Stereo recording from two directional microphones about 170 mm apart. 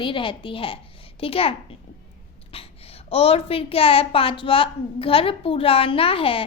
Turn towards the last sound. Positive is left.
turn(degrees=30)  # may be behind; listen again after turning